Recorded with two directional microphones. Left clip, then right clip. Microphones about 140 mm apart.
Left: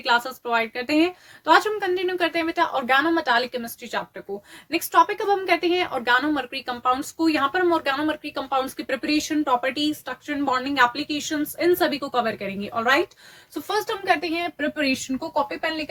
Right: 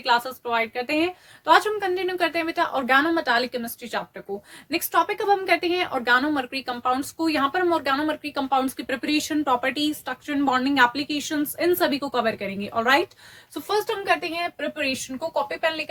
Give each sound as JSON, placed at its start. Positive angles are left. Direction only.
{"t": 0.0, "sound": "a woman's voice", "side_deg": 5}
{"t": 15.3, "sound": "speech", "side_deg": -55}